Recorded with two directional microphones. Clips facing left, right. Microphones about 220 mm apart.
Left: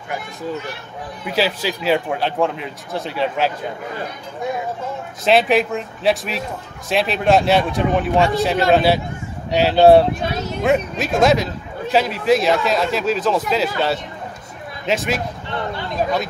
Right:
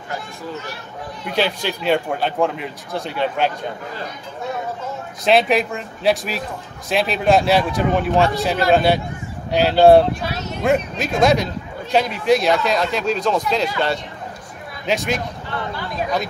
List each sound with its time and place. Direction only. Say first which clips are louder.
1.2 s a man's voice: left 1 dB; 5° left (ahead or behind)
5.2 s a man's voice: left 1 dB; centre (ahead or behind)
14.9 s a man's voice: left 1 dB; centre (ahead or behind)
15.5 s a sound: left 2 dB; 25° left (ahead or behind)